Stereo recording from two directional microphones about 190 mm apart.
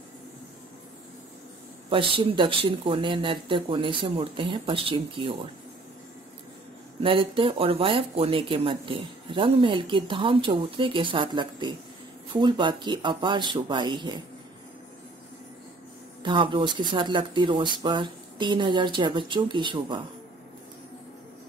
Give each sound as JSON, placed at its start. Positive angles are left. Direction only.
{"t": 1.9, "sound": "speech", "side_deg": -25}
{"t": 7.0, "sound": "speech", "side_deg": -30}
{"t": 16.2, "sound": "speech", "side_deg": -25}